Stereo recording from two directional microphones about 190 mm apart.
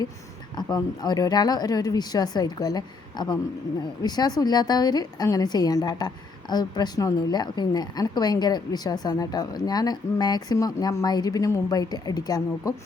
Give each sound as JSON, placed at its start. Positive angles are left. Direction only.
{"t": 0.5, "sound": "a woman's voice", "side_deg": 20}